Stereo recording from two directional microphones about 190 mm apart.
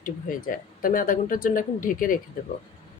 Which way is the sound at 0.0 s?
45° left (ahead or behind).